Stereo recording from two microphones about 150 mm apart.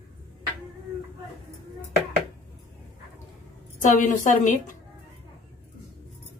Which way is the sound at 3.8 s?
60° left (ahead or behind).